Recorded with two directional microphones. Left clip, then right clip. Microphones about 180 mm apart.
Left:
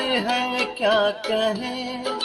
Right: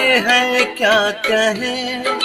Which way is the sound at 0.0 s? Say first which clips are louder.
Right 9 dB; 15° right (ahead or behind).